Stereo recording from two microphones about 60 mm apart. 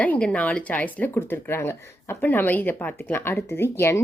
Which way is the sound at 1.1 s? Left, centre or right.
Left.